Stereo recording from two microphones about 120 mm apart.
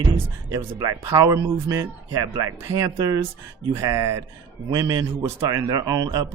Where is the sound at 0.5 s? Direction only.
30° right (ahead or behind).